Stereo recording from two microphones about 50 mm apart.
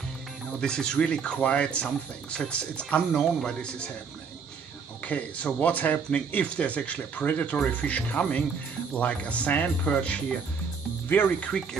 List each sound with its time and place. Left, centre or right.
0.6 s speech: centre
3.1 s speech: centre
5.0 s speech: left
11.1 s speech: left